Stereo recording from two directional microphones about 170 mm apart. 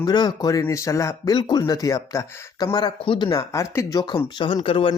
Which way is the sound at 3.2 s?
20° left (ahead or behind).